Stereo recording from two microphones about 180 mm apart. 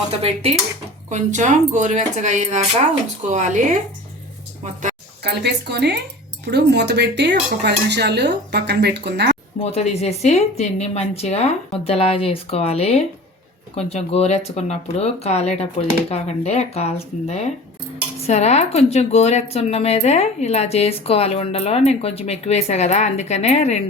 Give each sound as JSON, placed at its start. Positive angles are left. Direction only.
{"t": 0.1, "sound": "speech", "side_deg": -35}
{"t": 5.2, "sound": "speech", "side_deg": -70}
{"t": 9.6, "sound": "speech", "side_deg": 35}